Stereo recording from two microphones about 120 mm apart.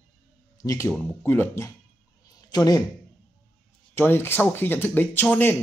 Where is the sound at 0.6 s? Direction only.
25° left (ahead or behind).